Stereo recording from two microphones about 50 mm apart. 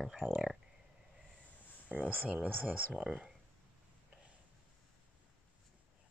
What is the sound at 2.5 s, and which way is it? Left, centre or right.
Speech, right.